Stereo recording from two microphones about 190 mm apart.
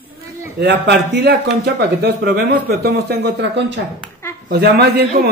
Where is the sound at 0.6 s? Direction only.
65° right (ahead or behind).